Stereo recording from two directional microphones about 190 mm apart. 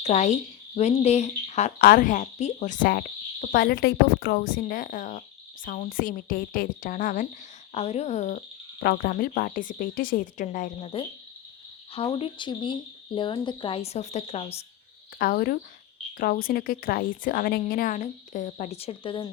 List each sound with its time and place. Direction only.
0.0 s speech: 35° left (ahead or behind)
1.8 s a woman's voice: 50° left (ahead or behind)
8.8 s a woman's voice: 55° left (ahead or behind); by 14.6 s 30° left (ahead or behind)
15.2 s a woman's voice: 50° left (ahead or behind); by 19.3 s 25° left (ahead or behind)